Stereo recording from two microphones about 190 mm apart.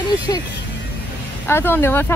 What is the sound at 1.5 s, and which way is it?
Speech, 10° left (ahead or behind).